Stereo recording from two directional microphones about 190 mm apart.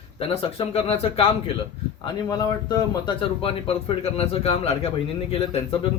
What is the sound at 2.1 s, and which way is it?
A man's voice, 20° left (ahead or behind).